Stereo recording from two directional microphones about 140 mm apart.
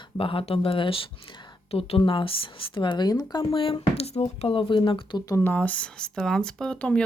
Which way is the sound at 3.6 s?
40° left (ahead or behind).